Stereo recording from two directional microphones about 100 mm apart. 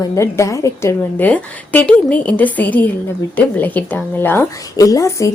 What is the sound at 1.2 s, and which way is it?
A woman's voice, 15° left (ahead or behind).